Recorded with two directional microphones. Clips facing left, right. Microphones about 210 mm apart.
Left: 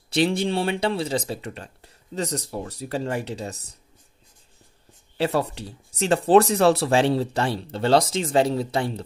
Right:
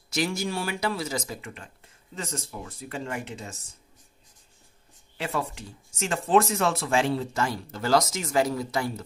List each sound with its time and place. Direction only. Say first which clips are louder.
0.1 s speech: left 6 dB; 30° left (ahead or behind)
5.1 s speech: left 7 dB; 35° left (ahead or behind)